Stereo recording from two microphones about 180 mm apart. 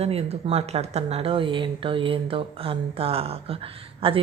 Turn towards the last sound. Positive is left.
turn(degrees=-30)  # may be behind; listen again after turning